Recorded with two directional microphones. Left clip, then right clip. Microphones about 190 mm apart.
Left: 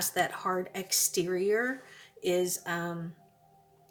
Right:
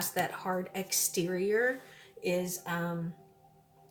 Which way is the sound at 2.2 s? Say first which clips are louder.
Left 3 dB; 45° left (ahead or behind).